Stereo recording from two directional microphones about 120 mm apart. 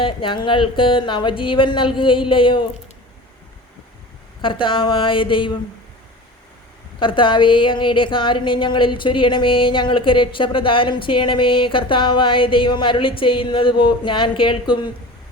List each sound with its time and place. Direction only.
0.0 s speech: 45° left (ahead or behind)
4.4 s speech: 45° left (ahead or behind)
7.0 s speech: 45° left (ahead or behind)